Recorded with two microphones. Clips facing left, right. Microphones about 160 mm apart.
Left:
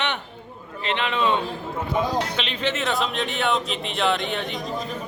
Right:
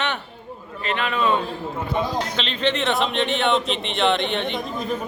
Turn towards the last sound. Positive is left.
turn(degrees=5)  # may be behind; listen again after turning